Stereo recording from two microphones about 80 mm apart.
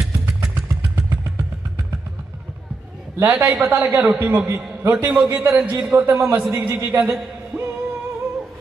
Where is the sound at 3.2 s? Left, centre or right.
Right.